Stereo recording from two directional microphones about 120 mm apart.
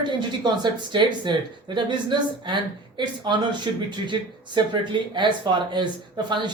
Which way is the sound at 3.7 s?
40° right (ahead or behind).